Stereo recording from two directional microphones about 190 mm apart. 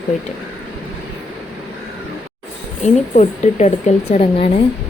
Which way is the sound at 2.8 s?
35° left (ahead or behind).